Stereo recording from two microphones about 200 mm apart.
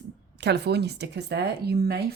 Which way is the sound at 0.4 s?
55° right (ahead or behind).